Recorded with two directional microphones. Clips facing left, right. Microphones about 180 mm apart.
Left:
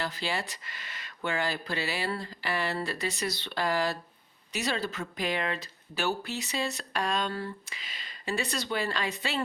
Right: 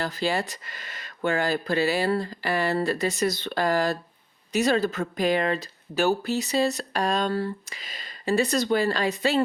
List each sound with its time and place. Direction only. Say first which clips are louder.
0.0 s speech: right 6 dB; 45° right (ahead or behind)